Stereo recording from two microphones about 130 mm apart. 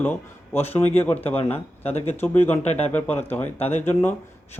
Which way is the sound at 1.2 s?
50° left (ahead or behind).